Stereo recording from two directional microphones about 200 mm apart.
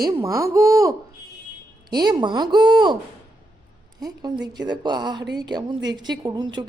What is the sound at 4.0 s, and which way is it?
A woman's voice, 20° right (ahead or behind).